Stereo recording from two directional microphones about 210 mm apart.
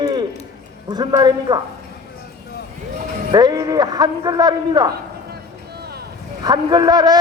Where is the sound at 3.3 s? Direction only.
20° right (ahead or behind).